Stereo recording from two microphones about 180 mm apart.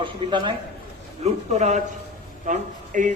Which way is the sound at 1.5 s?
40° right (ahead or behind).